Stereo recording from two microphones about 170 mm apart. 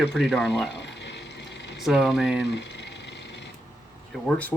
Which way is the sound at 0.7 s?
90° left.